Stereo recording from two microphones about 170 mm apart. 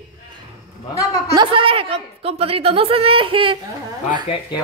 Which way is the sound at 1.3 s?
30° right (ahead or behind).